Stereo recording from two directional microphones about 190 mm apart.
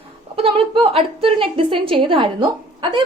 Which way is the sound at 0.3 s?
30° right (ahead or behind).